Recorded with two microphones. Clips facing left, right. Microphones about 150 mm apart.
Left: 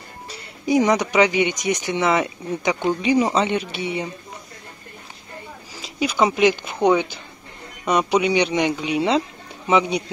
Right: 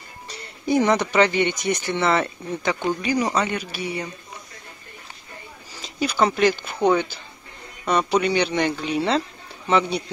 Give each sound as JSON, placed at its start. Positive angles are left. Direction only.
{"t": 0.3, "sound": "speech", "side_deg": 10}
{"t": 5.8, "sound": "speech", "side_deg": 10}
{"t": 7.8, "sound": "speech", "side_deg": 15}